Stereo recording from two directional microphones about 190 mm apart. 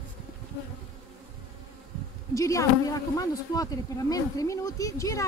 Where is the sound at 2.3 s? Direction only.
15° left (ahead or behind).